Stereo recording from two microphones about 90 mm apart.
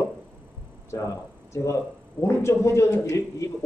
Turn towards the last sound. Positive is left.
turn(degrees=35)  # may be behind; listen again after turning